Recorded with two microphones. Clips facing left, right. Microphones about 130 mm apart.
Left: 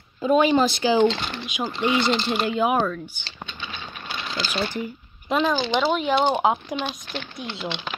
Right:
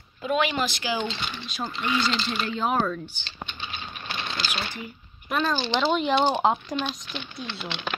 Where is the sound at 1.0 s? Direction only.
70° left (ahead or behind).